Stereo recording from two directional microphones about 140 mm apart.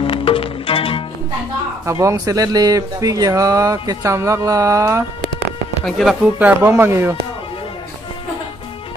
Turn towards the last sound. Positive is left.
turn(degrees=-15)  # may be behind; listen again after turning